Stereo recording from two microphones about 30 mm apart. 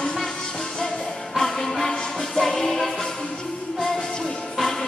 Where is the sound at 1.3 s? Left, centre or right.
Centre.